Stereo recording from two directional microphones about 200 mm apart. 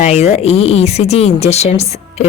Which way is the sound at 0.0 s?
35° left (ahead or behind).